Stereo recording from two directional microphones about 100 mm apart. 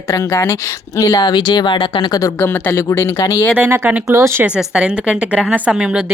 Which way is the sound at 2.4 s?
20° left (ahead or behind).